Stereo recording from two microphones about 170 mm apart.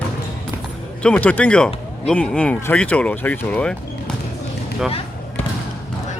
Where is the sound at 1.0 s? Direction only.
5° left (ahead or behind).